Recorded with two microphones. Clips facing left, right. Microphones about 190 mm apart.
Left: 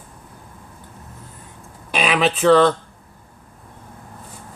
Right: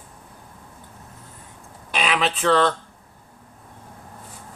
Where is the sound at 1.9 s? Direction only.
10° left (ahead or behind).